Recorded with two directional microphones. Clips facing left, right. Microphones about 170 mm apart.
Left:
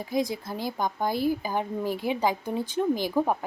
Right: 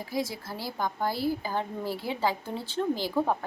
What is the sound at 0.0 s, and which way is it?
A woman's voice, 20° left (ahead or behind).